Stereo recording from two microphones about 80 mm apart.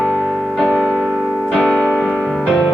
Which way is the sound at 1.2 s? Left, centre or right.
Centre.